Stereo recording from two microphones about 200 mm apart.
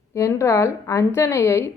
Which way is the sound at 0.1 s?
15° left (ahead or behind).